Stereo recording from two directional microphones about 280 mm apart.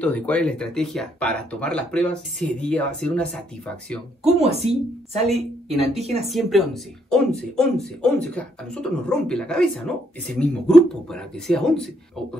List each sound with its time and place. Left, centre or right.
0.0 s speech: centre
4.2 s a woman's voice: right
6.3 s speech: centre